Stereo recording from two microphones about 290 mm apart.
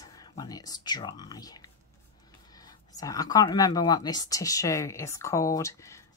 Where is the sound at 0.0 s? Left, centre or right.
Centre.